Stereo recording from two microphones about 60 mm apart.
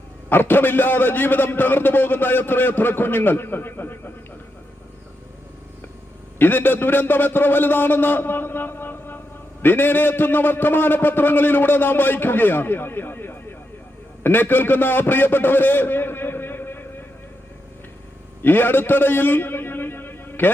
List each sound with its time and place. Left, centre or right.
0.3 s a man's voice: left
6.4 s a man's voice: left
18.4 s a man's voice: left